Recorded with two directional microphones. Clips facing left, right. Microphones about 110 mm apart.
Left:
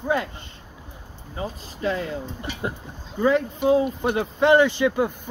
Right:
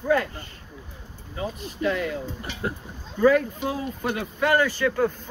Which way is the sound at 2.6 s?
20° left (ahead or behind).